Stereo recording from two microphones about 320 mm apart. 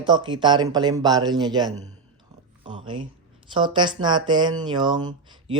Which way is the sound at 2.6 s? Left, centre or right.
Centre.